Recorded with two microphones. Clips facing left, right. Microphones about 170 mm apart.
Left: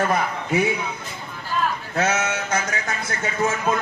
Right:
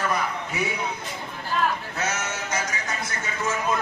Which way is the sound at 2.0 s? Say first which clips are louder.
Left 7 dB; 55° left (ahead or behind).